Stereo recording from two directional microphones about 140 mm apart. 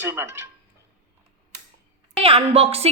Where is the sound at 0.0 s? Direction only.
20° right (ahead or behind).